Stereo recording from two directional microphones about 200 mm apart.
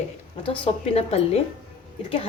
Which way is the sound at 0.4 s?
30° left (ahead or behind).